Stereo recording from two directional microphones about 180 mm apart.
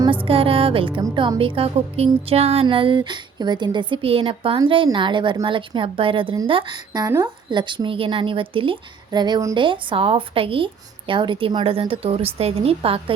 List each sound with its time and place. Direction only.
0.3 s music: 30° right (ahead or behind)
1.1 s a woman's voice: 25° right (ahead or behind)